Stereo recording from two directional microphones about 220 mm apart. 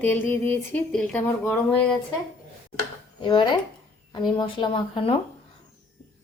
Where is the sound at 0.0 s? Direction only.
10° left (ahead or behind).